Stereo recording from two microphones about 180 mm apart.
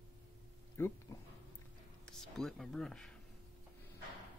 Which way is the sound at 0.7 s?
15° left (ahead or behind).